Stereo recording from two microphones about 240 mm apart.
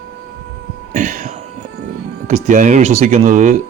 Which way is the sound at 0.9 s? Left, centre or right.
Right.